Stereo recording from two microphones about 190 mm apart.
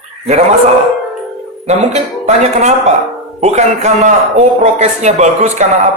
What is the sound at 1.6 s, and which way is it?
A man's voice, 35° right (ahead or behind).